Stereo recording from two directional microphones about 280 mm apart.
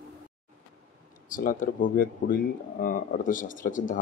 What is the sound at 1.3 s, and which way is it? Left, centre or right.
Speech, left.